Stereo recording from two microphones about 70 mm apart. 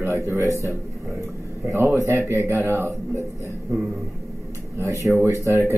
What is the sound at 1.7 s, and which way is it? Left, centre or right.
Speech, right.